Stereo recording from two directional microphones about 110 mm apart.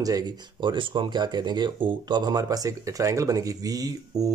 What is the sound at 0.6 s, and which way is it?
Speech, 45° right (ahead or behind).